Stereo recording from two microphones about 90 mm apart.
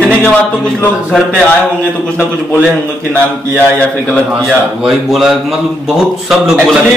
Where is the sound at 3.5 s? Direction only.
15° left (ahead or behind).